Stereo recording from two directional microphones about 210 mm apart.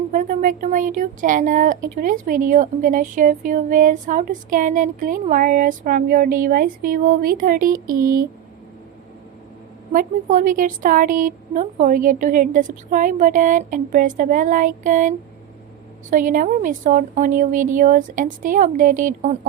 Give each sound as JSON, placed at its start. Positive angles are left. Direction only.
{"t": 0.1, "sound": "speech", "side_deg": -40}
{"t": 9.9, "sound": "speech", "side_deg": -40}